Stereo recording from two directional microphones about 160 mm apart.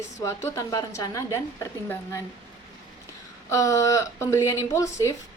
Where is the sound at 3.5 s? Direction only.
20° left (ahead or behind).